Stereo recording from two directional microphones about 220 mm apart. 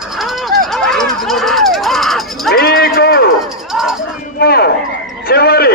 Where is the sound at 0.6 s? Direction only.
Centre (ahead or behind).